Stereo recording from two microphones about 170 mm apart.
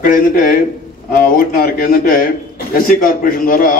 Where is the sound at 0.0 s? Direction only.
55° left (ahead or behind).